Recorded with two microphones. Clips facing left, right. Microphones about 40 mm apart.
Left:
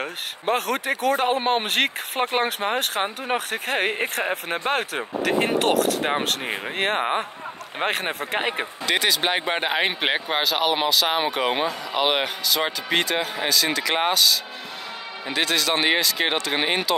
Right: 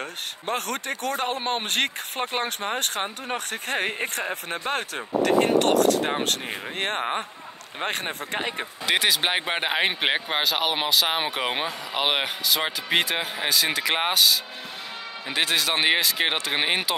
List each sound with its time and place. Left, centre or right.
0.0 s speech: centre
8.4 s speech: left
8.8 s speech: centre